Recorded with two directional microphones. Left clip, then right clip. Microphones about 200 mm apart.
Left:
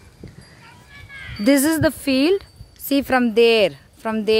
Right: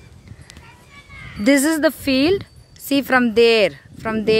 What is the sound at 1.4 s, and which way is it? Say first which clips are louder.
Speech: right 1 dB; centre (ahead or behind).